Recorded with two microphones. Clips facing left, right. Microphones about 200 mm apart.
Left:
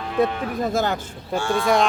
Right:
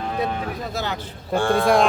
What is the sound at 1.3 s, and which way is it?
Speech, 55° right (ahead or behind).